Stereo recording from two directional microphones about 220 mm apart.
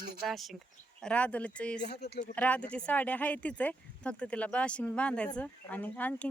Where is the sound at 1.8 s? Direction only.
45° left (ahead or behind).